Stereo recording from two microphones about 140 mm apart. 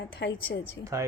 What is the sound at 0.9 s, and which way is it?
Speech, 20° right (ahead or behind).